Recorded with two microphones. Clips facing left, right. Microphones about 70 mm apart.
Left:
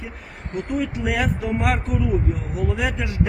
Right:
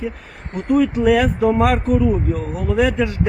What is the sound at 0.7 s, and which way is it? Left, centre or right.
Speech, right.